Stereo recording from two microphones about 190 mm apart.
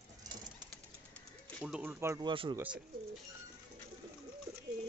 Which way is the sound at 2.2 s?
25° right (ahead or behind).